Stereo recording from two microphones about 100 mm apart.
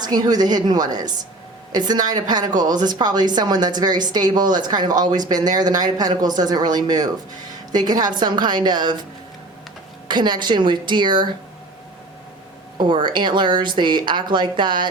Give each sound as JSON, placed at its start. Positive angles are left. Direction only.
{"t": 0.0, "sound": "speech", "side_deg": -45}
{"t": 10.1, "sound": "speech", "side_deg": -45}
{"t": 12.7, "sound": "speech", "side_deg": -50}